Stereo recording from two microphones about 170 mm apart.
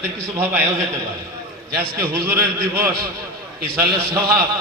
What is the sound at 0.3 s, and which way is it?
Speech, 15° right (ahead or behind).